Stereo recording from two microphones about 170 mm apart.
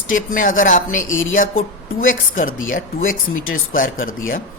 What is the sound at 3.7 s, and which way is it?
Speech, 55° left (ahead or behind).